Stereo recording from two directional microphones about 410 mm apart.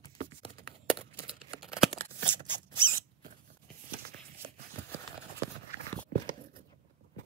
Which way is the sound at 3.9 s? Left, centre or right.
Right.